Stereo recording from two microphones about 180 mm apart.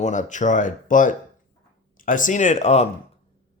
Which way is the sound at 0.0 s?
45° left (ahead or behind).